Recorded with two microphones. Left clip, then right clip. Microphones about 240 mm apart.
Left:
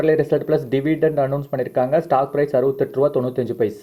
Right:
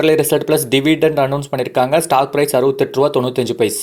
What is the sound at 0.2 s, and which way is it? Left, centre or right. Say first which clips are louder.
Speech: right 4 dB; centre.